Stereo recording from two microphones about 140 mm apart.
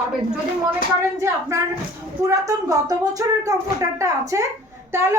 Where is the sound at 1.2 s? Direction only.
20° right (ahead or behind).